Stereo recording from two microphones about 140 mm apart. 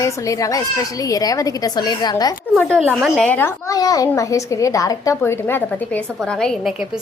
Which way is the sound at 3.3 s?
20° left (ahead or behind).